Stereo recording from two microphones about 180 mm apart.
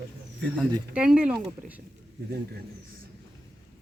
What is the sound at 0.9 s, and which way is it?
Speech, 5° right (ahead or behind).